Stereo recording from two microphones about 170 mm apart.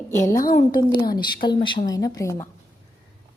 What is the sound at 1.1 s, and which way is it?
A woman's voice, 25° left (ahead or behind).